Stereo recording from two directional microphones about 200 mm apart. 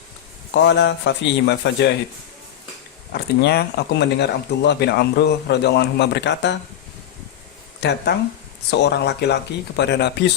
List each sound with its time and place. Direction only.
0.5 s speech: 60° left (ahead or behind)
3.1 s speech: 50° left (ahead or behind)
7.8 s speech: 60° left (ahead or behind)